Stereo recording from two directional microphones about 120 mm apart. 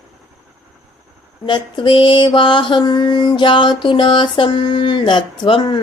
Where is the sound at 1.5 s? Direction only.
40° left (ahead or behind).